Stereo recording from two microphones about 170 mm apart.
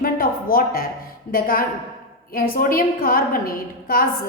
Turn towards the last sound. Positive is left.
turn(degrees=60)  # may be behind; listen again after turning